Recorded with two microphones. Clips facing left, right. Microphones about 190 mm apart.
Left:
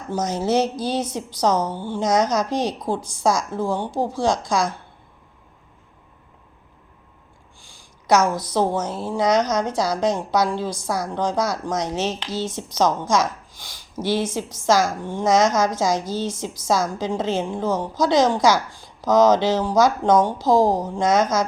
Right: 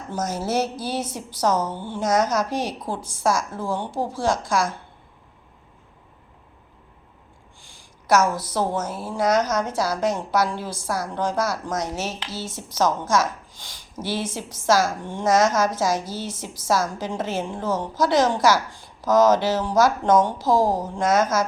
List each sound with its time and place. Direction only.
0.3 s speech: 5° right (ahead or behind)
1.0 s a woman's voice: 15° left (ahead or behind)
2.0 s speech: 5° right (ahead or behind)
2.3 s a woman's voice: 15° left (ahead or behind)
8.2 s a woman's voice: 15° left (ahead or behind)
8.8 s a woman's voice: 5° right (ahead or behind)
9.6 s a woman's voice: 15° left (ahead or behind)
10.4 s a woman's voice: 5° right (ahead or behind)
10.7 s a woman's voice: 15° left (ahead or behind)
14.0 s a woman's voice: 10° right (ahead or behind)
15.0 s a woman's voice: 10° left (ahead or behind)
15.3 s a woman's voice: 5° right (ahead or behind)
15.5 s a woman's voice: 15° left (ahead or behind)
21.0 s a woman's voice: 5° right (ahead or behind)